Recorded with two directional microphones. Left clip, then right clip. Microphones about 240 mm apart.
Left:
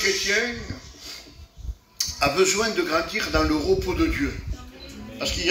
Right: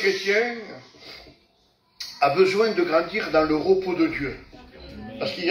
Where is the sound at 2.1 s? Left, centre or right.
Centre.